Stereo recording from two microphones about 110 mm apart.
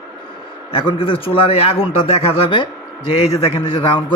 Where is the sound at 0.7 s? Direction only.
50° left (ahead or behind).